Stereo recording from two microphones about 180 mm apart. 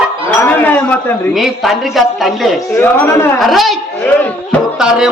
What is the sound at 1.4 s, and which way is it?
A man's voice, centre (ahead or behind).